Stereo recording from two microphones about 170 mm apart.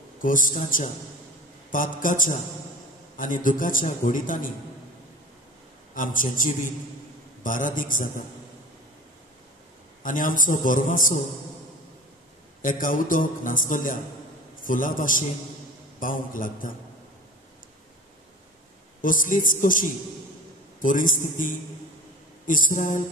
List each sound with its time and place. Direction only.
0.2 s a man's voice: 50° left (ahead or behind)
5.9 s a man's voice: 50° left (ahead or behind)
10.0 s a man's voice: 50° left (ahead or behind)
12.6 s a man's voice: 50° left (ahead or behind)
18.9 s a man's voice: 50° left (ahead or behind)